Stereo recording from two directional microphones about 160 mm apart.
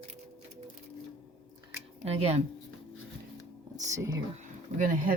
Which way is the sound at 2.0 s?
40° right (ahead or behind).